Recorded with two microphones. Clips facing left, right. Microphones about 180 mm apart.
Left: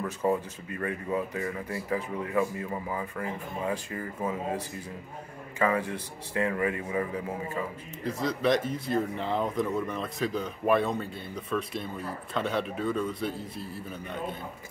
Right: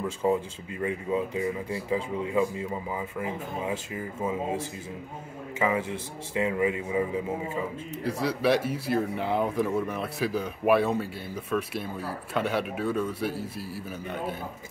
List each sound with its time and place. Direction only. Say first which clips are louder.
0.0 s a man's voice: right 2 dB; 15° right (ahead or behind)
5.6 s a man's voice: even; 15° right (ahead or behind)